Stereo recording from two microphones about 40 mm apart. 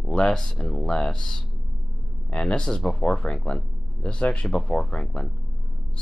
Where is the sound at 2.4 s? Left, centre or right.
Left.